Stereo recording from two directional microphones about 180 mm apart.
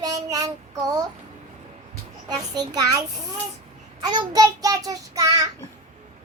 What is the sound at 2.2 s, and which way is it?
Child singing, 20° right (ahead or behind).